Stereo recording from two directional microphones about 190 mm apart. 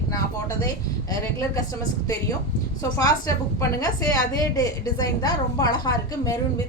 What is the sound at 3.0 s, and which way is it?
A woman's voice, 20° left (ahead or behind).